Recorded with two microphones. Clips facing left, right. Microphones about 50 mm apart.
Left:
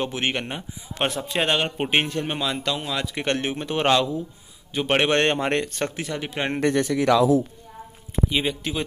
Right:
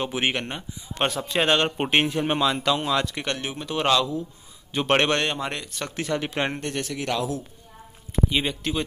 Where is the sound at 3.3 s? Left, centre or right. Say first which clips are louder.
Left 4 dB; left.